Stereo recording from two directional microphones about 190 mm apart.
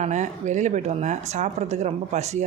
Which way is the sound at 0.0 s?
40° right (ahead or behind).